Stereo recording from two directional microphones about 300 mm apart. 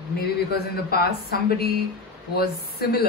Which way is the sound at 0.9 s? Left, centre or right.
Left.